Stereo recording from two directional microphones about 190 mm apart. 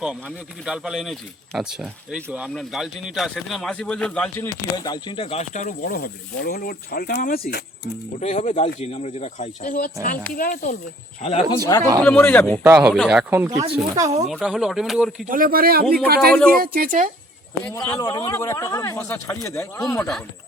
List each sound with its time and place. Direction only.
0.0 s speech: 5° right (ahead or behind)
4.8 s speech: 20° left (ahead or behind); by 7.6 s 55° left (ahead or behind)
8.2 s speech: 40° left (ahead or behind)
11.2 s speech: 35° left (ahead or behind)
11.5 s a man's voice: 15° left (ahead or behind)
12.6 s speech: 10° right (ahead or behind)
14.3 s speech: centre (ahead or behind)
15.3 s speech: 50° right (ahead or behind)
17.7 s a man's voice: 15° left (ahead or behind)